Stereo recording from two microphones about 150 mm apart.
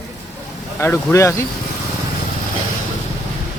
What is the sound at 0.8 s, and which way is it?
Speech, 15° left (ahead or behind).